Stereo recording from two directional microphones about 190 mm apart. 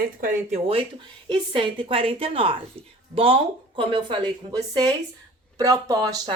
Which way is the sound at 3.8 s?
25° right (ahead or behind).